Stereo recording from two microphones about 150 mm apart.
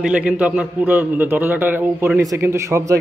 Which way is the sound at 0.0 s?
10° right (ahead or behind).